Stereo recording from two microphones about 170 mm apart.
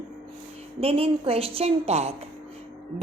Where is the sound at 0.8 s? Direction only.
35° right (ahead or behind).